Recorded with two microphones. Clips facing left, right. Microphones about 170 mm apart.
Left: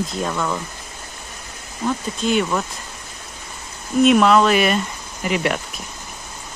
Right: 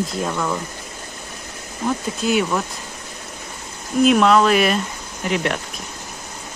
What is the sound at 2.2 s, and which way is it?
Speech, 5° right (ahead or behind).